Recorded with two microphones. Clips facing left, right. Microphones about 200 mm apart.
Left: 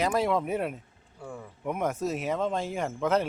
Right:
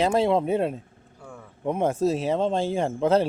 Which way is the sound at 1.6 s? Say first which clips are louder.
Right 6 dB; 30° right (ahead or behind).